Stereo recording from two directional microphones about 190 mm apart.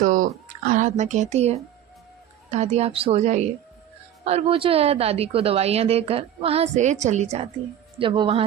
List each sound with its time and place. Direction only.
0.0 s a woman's voice: 45° right (ahead or behind)
7.9 s speech: 25° right (ahead or behind)